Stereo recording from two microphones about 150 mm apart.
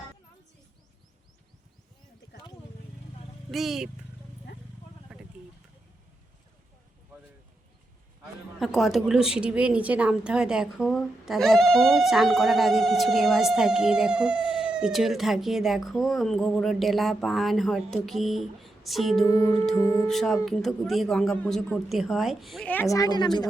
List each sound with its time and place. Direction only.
3.5 s speech: centre (ahead or behind)
5.1 s a sound: 10° right (ahead or behind)
8.5 s speech: centre (ahead or behind)
19.2 s speech: 20° left (ahead or behind)
19.7 s music: 20° left (ahead or behind)
20.1 s speech: centre (ahead or behind)
22.7 s music: 15° left (ahead or behind)
23.0 s speech: 25° left (ahead or behind)